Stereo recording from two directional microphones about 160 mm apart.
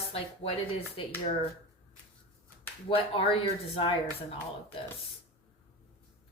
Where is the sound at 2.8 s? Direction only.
35° left (ahead or behind).